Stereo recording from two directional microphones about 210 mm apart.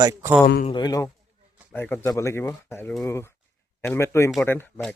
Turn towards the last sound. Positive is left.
turn(degrees=10)  # may be behind; listen again after turning